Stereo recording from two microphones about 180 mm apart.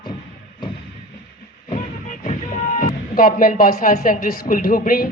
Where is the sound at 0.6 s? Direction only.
25° left (ahead or behind).